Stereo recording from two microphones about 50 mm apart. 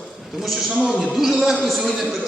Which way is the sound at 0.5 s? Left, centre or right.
Centre.